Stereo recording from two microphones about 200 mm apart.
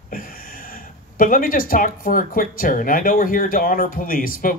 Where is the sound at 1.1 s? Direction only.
45° left (ahead or behind).